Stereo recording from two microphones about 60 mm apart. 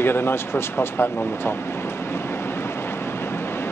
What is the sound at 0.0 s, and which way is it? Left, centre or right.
Speech, left.